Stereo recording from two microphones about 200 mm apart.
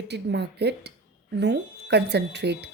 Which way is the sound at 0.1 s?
55° right (ahead or behind).